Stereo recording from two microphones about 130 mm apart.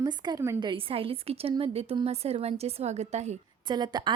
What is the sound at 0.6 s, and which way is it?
A woman's voice, 40° right (ahead or behind).